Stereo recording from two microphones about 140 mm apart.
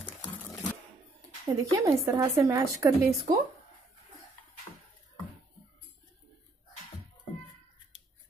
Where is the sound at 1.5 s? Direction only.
25° right (ahead or behind).